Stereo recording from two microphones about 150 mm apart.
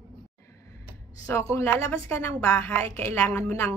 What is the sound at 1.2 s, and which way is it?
A woman's voice, 20° left (ahead or behind).